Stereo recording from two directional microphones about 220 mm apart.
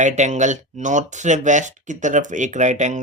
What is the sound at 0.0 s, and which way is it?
Speech, 35° right (ahead or behind).